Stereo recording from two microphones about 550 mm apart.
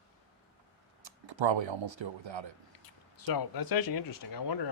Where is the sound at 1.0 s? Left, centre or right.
Right.